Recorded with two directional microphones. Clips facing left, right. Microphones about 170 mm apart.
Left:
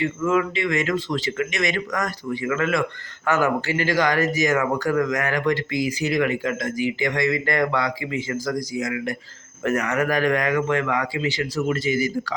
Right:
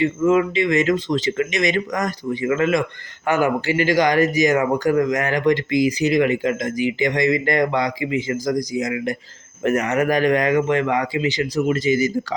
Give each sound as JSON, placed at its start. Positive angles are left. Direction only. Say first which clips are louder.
{"t": 0.0, "sound": "speech", "louder": "right 5 dB", "side_deg": -20}